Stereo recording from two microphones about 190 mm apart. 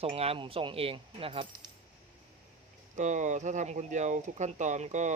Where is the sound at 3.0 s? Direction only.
40° right (ahead or behind).